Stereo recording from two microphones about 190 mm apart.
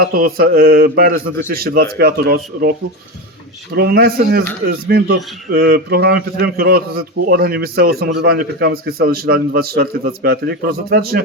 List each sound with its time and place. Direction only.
0.0 s a man's voice: 50° right (ahead or behind)
3.8 s a man's voice: 55° right (ahead or behind)